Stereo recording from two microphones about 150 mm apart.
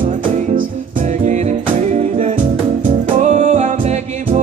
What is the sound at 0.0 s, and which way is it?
Music, 65° right (ahead or behind).